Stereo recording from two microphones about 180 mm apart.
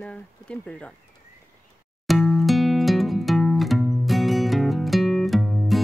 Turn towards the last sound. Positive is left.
turn(degrees=0)  # may be behind; listen again after turning